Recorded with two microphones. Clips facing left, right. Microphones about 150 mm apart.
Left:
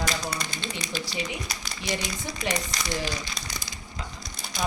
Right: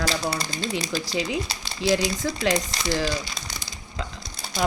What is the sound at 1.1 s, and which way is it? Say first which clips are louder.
Speech: right 9 dB; 90° right.